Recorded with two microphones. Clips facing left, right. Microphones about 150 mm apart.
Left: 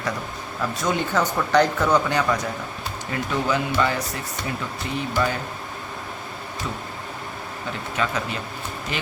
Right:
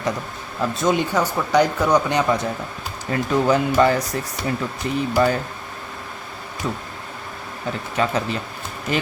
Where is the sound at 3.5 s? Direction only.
40° right (ahead or behind).